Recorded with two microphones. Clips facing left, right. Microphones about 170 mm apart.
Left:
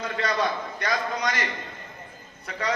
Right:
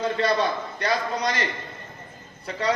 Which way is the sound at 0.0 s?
30° right (ahead or behind).